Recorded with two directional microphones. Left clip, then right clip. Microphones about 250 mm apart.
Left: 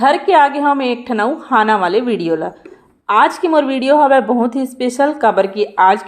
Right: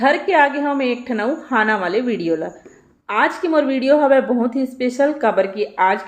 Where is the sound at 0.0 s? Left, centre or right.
Centre.